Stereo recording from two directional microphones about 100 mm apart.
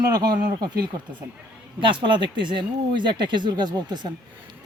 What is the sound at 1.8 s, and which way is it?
Speech, 55° right (ahead or behind).